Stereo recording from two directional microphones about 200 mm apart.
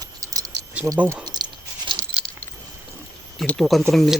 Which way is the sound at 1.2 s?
20° right (ahead or behind).